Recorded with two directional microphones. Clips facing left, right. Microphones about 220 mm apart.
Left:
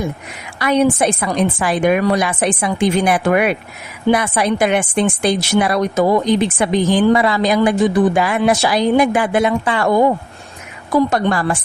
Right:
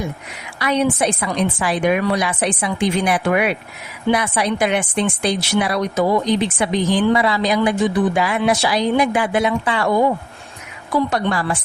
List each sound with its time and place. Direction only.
0.6 s a woman's voice: 50° left (ahead or behind)